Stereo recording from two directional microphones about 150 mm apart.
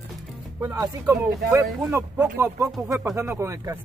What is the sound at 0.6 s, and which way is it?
Speech, 20° right (ahead or behind).